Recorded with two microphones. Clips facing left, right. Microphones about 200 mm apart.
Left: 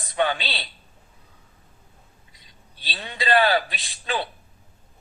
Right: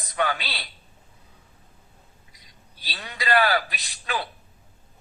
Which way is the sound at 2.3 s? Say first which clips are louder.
Even; 25° left (ahead or behind).